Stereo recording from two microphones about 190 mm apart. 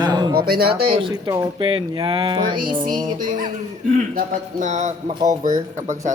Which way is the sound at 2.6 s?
45° right (ahead or behind).